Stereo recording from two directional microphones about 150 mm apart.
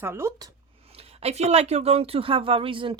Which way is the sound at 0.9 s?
45° right (ahead or behind).